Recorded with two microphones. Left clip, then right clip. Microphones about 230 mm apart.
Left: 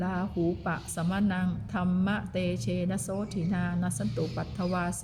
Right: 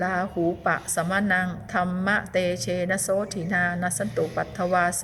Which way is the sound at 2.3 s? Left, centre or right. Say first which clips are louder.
Right 8 dB; left.